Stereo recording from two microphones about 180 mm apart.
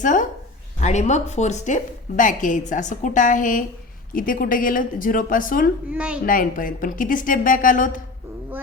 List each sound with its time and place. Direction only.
0.0 s a woman's voice: 45° left (ahead or behind)
5.9 s a woman's voice: 5° right (ahead or behind)
6.2 s a woman's voice: 50° left (ahead or behind)